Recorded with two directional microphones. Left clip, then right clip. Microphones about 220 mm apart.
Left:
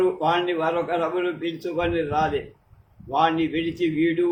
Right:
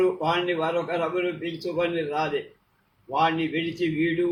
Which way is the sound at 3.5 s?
15° left (ahead or behind).